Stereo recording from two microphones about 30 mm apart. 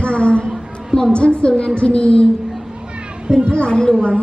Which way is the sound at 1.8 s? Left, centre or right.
Left.